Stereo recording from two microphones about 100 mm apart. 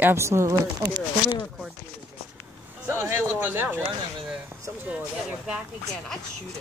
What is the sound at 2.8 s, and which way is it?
Speech, 25° right (ahead or behind).